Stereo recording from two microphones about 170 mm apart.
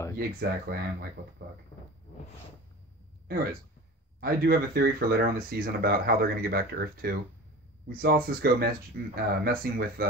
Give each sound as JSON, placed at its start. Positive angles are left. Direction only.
{"t": 0.2, "sound": "speech", "side_deg": -65}
{"t": 4.2, "sound": "speech", "side_deg": -60}